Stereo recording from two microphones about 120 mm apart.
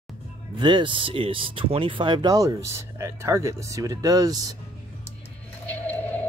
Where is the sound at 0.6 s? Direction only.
40° right (ahead or behind).